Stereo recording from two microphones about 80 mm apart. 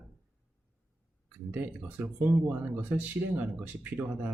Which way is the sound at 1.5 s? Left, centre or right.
Right.